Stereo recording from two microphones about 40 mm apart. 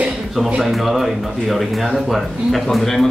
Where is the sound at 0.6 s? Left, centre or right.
Centre.